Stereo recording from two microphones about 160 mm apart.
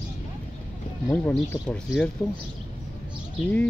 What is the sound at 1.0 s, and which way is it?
Speech, 10° left (ahead or behind).